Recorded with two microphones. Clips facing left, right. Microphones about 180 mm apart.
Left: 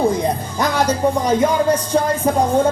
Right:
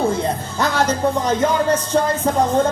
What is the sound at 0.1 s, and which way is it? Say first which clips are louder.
Speech: left 1 dB; 15° left (ahead or behind).